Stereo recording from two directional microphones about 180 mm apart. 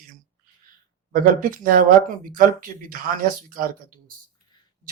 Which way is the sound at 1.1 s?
50° right (ahead or behind).